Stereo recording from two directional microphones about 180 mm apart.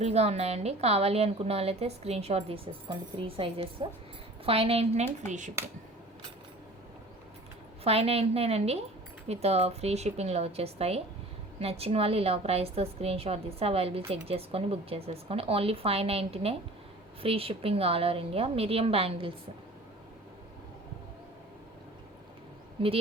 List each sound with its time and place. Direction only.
0.0 s a woman's voice: 35° right (ahead or behind)
7.9 s a woman's voice: 35° right (ahead or behind)
22.8 s a woman's voice: 30° right (ahead or behind)